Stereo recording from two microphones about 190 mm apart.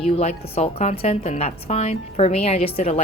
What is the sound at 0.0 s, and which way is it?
A woman's voice, 30° left (ahead or behind).